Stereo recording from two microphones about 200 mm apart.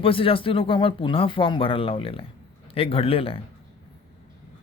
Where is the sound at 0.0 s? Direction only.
25° left (ahead or behind).